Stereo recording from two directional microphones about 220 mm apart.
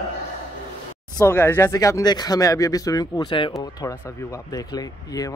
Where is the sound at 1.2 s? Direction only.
10° left (ahead or behind).